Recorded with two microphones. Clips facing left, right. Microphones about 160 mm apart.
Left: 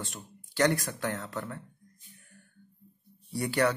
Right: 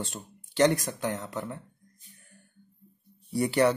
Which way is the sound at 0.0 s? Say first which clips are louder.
Right 4 dB; 25° right (ahead or behind).